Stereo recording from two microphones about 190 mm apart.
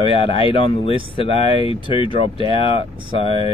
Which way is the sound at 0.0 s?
25° left (ahead or behind).